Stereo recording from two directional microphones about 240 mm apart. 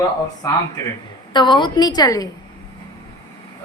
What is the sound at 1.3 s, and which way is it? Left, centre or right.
Speech, centre.